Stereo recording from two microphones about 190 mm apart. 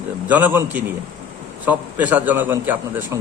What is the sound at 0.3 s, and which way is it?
A man's voice, 10° right (ahead or behind).